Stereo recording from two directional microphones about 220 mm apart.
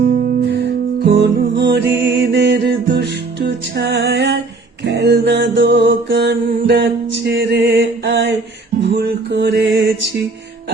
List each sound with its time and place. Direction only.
0.0 s music: 35° right (ahead or behind)
4.9 s mantra: 50° right (ahead or behind)
7.3 s a sound: 50° right (ahead or behind)
8.8 s music: 50° right (ahead or behind)